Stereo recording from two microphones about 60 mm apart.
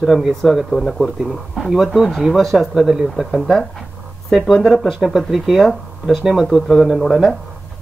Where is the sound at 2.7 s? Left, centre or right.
Centre.